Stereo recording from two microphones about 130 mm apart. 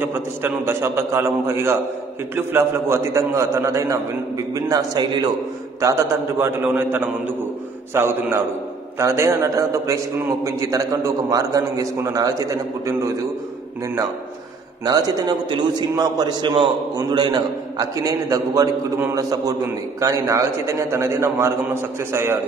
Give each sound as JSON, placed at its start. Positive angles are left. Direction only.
{"t": 0.0, "sound": "a man's voice", "side_deg": -15}
{"t": 6.4, "sound": "a man's voice", "side_deg": -15}
{"t": 14.9, "sound": "a man's voice", "side_deg": -30}